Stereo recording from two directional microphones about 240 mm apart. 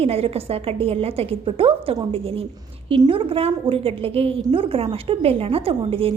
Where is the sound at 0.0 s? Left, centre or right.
Right.